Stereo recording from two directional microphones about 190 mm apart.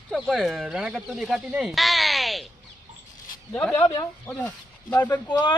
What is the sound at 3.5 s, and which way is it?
Speech, 10° left (ahead or behind).